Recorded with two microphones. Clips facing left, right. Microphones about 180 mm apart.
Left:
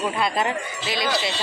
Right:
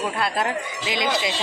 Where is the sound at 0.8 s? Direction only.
15° right (ahead or behind).